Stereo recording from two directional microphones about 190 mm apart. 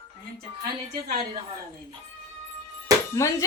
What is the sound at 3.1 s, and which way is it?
Speech, 15° left (ahead or behind).